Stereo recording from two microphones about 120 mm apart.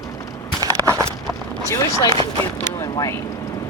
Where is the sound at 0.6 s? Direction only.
30° right (ahead or behind).